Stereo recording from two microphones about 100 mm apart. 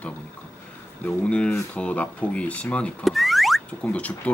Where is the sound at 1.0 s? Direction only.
10° left (ahead or behind).